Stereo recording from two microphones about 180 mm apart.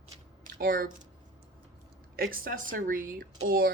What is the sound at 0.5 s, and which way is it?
Speech, 55° right (ahead or behind).